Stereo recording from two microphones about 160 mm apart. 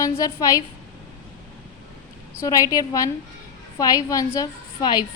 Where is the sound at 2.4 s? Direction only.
20° left (ahead or behind).